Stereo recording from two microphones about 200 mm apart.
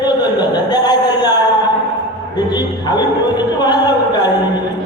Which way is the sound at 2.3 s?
20° left (ahead or behind).